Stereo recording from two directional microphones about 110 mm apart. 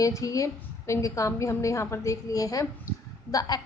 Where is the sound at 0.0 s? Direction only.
30° left (ahead or behind).